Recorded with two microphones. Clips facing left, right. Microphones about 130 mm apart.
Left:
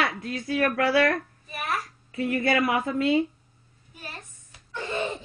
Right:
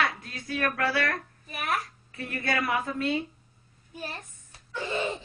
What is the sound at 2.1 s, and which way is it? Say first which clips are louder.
Speech: left 7 dB; 20° left (ahead or behind).